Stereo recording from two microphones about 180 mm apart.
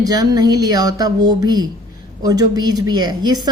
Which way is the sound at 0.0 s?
20° right (ahead or behind).